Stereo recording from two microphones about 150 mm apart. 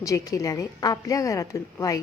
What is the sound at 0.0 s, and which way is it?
A woman's voice, 20° left (ahead or behind).